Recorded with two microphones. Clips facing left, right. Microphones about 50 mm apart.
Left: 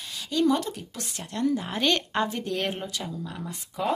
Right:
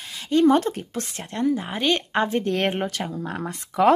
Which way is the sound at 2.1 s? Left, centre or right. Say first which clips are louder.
Right 5 dB; right.